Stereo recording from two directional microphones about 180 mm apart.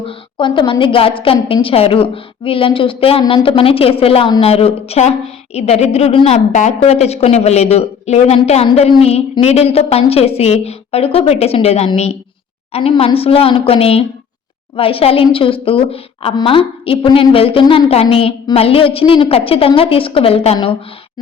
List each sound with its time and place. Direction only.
0.0 s a woman's voice: 30° left (ahead or behind)